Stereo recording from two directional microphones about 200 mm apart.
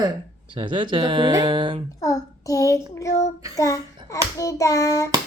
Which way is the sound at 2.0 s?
15° left (ahead or behind).